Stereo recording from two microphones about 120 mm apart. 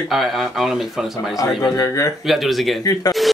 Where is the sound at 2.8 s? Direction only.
30° left (ahead or behind).